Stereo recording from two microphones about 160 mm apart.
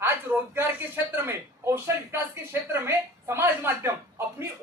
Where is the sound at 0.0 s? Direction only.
15° right (ahead or behind).